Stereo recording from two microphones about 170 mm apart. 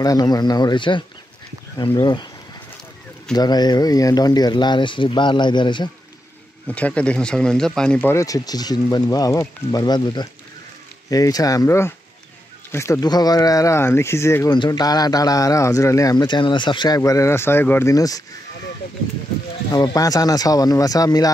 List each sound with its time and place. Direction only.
0.0 s speech: 20° left (ahead or behind)
3.3 s speech: 25° left (ahead or behind)
6.7 s speech: 5° left (ahead or behind)
19.7 s speech: 25° left (ahead or behind)